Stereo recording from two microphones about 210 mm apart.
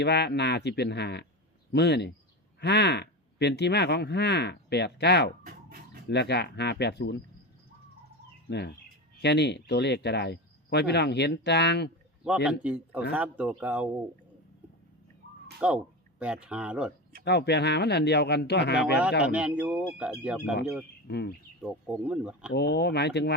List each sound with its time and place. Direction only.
0.0 s speech: 55° left (ahead or behind)
5.5 s chicken: 45° right (ahead or behind)
6.1 s speech: 50° left (ahead or behind)
8.4 s speech: 50° left (ahead or behind)
12.5 s speech: 5° right (ahead or behind)
15.6 s speech: 5° right (ahead or behind)
17.2 s speech: 50° left (ahead or behind)
19.2 s speech: 5° right (ahead or behind)
21.1 s speech: 50° left (ahead or behind)
21.6 s speech: 5° right (ahead or behind)
22.5 s speech: 50° left (ahead or behind)